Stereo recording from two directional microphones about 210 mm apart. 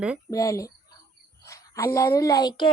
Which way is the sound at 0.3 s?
15° left (ahead or behind).